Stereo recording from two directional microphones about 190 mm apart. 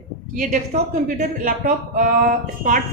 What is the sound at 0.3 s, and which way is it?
Speech, 40° right (ahead or behind).